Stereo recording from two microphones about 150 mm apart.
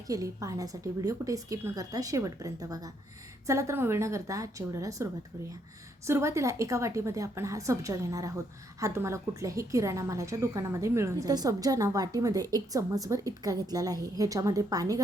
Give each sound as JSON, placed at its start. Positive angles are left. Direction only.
{"t": 0.1, "sound": "a woman's voice", "side_deg": -20}
{"t": 6.1, "sound": "a woman's voice", "side_deg": -20}